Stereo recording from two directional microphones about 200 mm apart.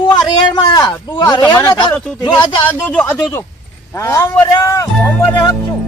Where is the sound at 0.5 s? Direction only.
20° left (ahead or behind).